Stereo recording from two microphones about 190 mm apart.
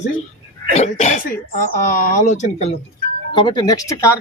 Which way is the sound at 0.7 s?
35° left (ahead or behind).